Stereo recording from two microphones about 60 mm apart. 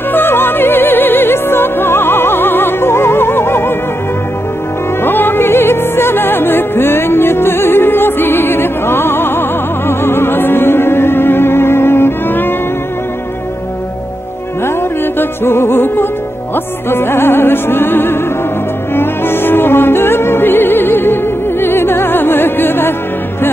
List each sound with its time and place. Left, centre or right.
0.1 s music: left
5.0 s music: left
14.8 s music: left